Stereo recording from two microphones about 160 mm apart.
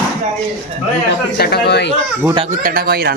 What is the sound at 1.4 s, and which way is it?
Speech, 85° left.